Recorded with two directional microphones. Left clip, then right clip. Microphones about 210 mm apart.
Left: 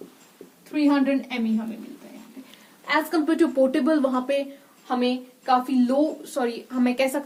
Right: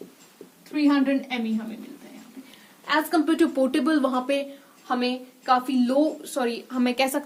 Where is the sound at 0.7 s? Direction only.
15° right (ahead or behind).